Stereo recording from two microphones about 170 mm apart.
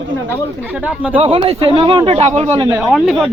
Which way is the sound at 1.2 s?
35° right (ahead or behind).